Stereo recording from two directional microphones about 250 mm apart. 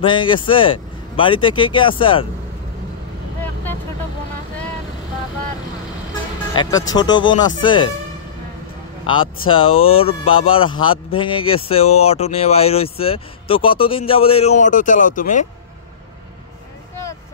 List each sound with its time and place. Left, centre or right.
0.0 s speech: centre
6.5 s speech: centre
9.0 s speech: centre